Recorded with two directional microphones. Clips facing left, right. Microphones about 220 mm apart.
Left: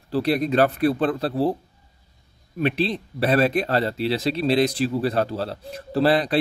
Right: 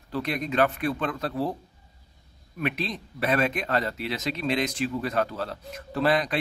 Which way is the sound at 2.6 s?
30° left (ahead or behind).